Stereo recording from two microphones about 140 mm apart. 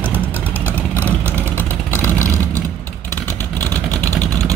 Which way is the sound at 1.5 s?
15° left (ahead or behind).